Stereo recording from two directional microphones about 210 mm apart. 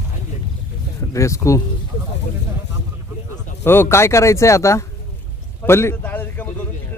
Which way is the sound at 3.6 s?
10° left (ahead or behind).